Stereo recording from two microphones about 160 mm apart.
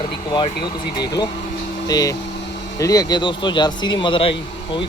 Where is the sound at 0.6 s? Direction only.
25° left (ahead or behind).